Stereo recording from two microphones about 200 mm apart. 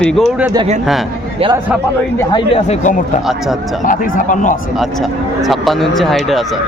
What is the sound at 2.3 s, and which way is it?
Speech, 25° left (ahead or behind).